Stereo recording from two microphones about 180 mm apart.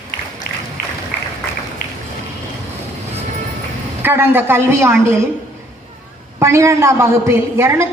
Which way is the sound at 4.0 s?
10° right (ahead or behind).